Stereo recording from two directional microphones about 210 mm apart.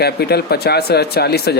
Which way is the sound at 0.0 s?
50° left (ahead or behind).